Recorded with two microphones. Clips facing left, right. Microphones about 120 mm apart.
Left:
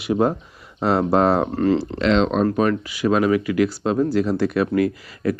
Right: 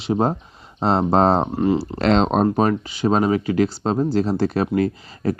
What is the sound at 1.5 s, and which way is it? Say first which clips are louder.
Speech: left 1 dB; 15° right (ahead or behind).